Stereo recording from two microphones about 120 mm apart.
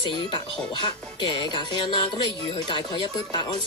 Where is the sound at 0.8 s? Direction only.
40° left (ahead or behind).